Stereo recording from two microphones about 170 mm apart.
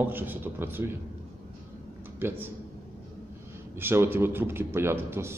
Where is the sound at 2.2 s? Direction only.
10° right (ahead or behind).